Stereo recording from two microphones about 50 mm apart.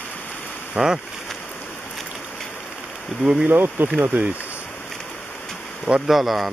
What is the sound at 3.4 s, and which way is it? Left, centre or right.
Speech, right.